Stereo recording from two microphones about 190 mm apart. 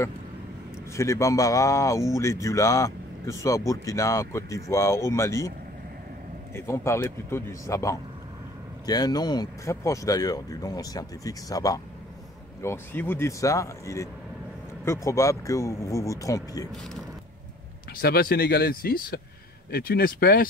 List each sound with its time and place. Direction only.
0.9 s speech: 15° left (ahead or behind)
6.5 s speech: 15° left (ahead or behind)
18.0 s speech: 55° left (ahead or behind)